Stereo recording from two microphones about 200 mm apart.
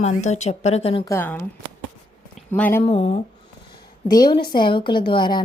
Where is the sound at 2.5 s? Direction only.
10° left (ahead or behind).